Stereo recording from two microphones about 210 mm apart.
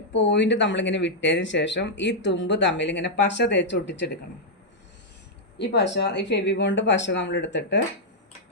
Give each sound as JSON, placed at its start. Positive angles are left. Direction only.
{"t": 0.1, "sound": "speech", "side_deg": 55}
{"t": 5.5, "sound": "speech", "side_deg": 55}